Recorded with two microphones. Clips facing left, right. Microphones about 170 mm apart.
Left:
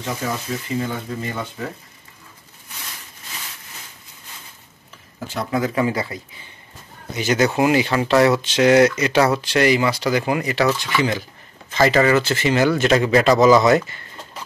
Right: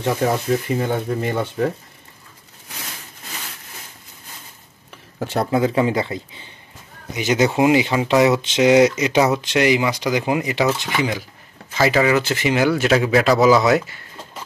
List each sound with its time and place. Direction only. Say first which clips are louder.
0.0 s speech: right 7 dB; 60° right (ahead or behind)
5.5 s a man's voice: right 2 dB; 25° right (ahead or behind); by 14.2 s 5° right (ahead or behind)